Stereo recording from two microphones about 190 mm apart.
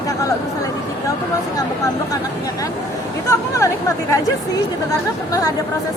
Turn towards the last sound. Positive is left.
turn(degrees=20)  # may be behind; listen again after turning